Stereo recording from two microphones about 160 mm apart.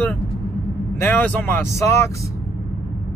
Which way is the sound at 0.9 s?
10° left (ahead or behind).